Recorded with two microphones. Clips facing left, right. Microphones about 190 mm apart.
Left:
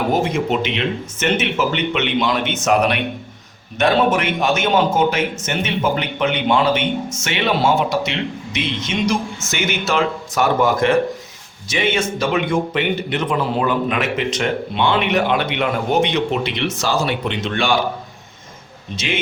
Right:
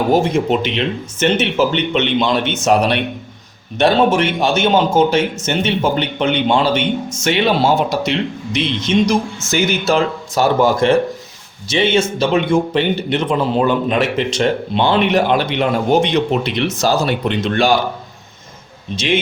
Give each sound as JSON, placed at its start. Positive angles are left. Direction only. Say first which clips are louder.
{"t": 0.6, "sound": "a man's voice", "louder": "right 2 dB", "side_deg": -35}